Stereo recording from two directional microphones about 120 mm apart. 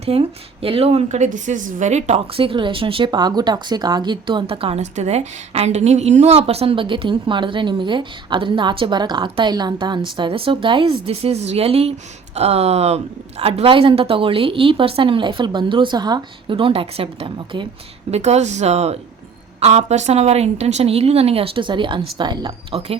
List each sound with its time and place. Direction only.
0.0 s a woman's voice: 55° right (ahead or behind)
2.3 s speech: 50° right (ahead or behind)
4.8 s a woman's voice: 70° right (ahead or behind); by 17.7 s 45° right (ahead or behind)
18.1 s speech: 65° right (ahead or behind); by 22.5 s 40° right (ahead or behind)